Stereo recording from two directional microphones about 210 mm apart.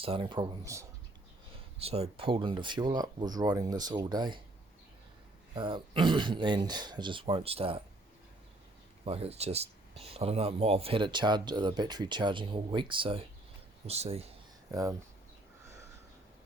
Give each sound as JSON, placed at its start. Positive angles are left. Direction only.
{"t": 0.0, "sound": "speech", "side_deg": -25}
{"t": 1.8, "sound": "speech", "side_deg": -30}
{"t": 5.5, "sound": "speech", "side_deg": -25}
{"t": 9.0, "sound": "speech", "side_deg": -30}
{"t": 14.7, "sound": "speech", "side_deg": -15}